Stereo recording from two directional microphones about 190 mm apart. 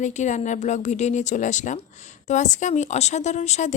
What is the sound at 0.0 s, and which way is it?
Speech, 40° left (ahead or behind).